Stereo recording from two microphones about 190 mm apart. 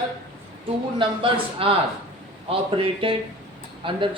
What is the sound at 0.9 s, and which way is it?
Speech, 25° right (ahead or behind).